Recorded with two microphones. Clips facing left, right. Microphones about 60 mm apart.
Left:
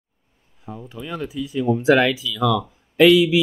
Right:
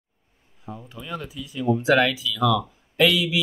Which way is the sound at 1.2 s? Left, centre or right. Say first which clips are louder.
Left 4 dB; left.